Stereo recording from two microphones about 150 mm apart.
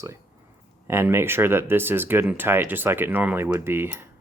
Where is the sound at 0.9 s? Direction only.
15° right (ahead or behind).